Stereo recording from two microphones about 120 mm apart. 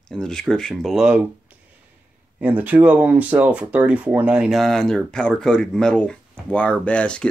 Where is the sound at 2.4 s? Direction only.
15° right (ahead or behind).